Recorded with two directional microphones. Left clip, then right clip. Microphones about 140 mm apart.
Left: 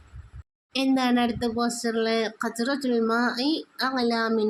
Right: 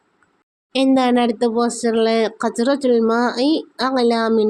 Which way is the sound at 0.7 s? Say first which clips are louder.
Right 8 dB; 30° right (ahead or behind).